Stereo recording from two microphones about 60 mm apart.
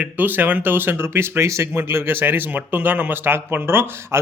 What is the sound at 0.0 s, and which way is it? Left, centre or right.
Speech, right.